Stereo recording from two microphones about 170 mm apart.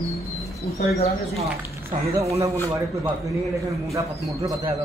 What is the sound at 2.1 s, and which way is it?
Speech, 15° right (ahead or behind).